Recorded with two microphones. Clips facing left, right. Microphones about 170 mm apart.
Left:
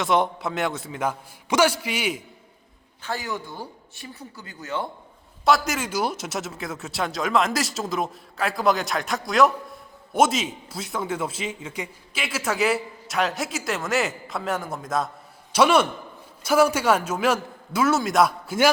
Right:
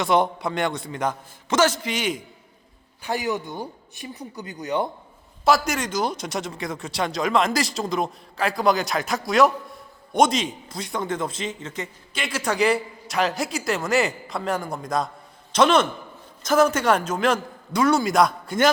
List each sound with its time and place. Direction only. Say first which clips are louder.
0.0 s speech: right 1 dB; centre (ahead or behind)
3.0 s speech: right 4 dB; 15° right (ahead or behind)
5.5 s a man's voice: right 1 dB; centre (ahead or behind)